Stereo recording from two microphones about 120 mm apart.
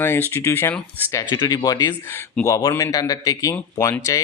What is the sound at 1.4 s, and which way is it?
Speech, 35° left (ahead or behind).